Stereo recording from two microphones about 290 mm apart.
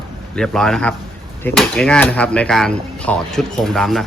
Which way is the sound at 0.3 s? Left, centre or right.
Centre.